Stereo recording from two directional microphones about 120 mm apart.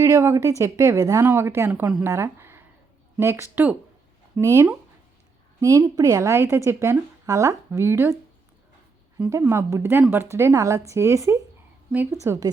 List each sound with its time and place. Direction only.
0.0 s a woman's voice: 25° right (ahead or behind)
9.1 s a woman's voice: 20° right (ahead or behind)